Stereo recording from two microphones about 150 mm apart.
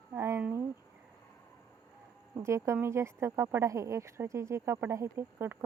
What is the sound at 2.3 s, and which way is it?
Speech, 20° right (ahead or behind).